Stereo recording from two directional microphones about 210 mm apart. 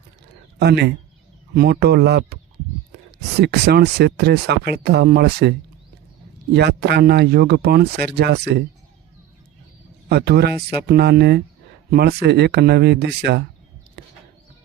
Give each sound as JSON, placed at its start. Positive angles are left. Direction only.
{"t": 0.6, "sound": "speech", "side_deg": -50}
{"t": 3.4, "sound": "speech", "side_deg": -50}
{"t": 10.1, "sound": "speech", "side_deg": -50}